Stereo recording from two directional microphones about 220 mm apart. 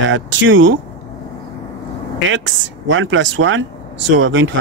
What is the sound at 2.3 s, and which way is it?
Speech, 60° right (ahead or behind).